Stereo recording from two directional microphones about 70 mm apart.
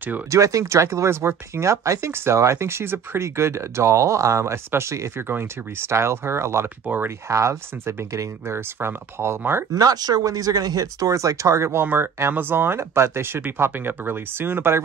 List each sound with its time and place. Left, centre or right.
0.3 s speech: right
9.7 s speech: right